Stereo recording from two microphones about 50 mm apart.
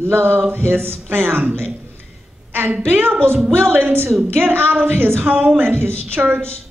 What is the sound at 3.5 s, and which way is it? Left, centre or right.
A woman's voice, right.